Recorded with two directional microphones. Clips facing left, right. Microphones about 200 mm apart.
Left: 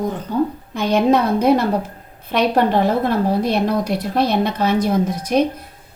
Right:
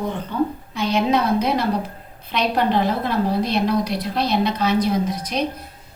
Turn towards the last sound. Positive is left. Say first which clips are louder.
# left 7 dB
turn(degrees=50)  # may be behind; listen again after turning